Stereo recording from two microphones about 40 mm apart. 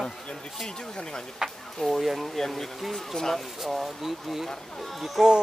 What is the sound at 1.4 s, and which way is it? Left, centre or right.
Speech, centre.